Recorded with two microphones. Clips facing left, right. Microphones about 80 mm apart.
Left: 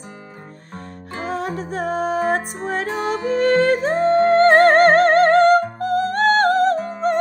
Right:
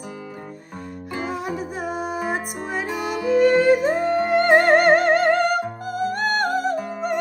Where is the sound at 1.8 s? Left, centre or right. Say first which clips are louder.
Left 8 dB; left.